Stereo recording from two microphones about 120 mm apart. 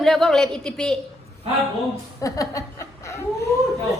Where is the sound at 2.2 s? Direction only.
30° left (ahead or behind).